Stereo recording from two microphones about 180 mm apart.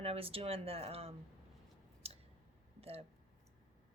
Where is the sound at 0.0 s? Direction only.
35° right (ahead or behind).